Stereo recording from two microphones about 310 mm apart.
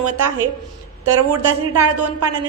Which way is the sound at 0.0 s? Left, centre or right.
Right.